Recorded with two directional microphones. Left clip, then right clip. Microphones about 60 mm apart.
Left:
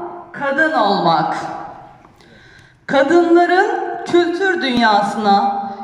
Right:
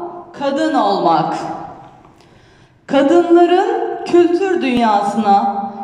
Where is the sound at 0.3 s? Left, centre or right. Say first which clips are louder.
Left 2 dB; right.